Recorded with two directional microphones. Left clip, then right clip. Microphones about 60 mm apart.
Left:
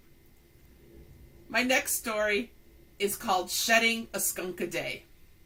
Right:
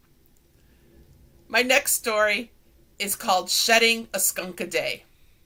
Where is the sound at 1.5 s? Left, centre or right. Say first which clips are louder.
Right 6 dB; right.